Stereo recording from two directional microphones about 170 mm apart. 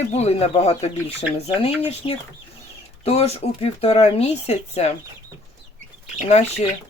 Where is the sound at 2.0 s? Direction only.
30° left (ahead or behind).